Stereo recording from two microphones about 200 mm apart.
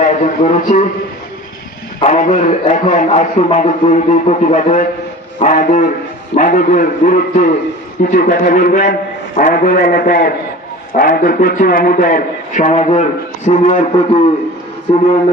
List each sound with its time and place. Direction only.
0.0 s a man's voice: 35° left (ahead or behind)
2.1 s a man's voice: 40° left (ahead or behind)